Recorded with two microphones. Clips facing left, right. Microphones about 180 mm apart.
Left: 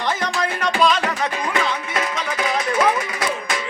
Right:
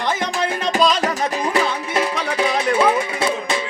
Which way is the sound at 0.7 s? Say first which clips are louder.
Right 1 dB; 40° right (ahead or behind).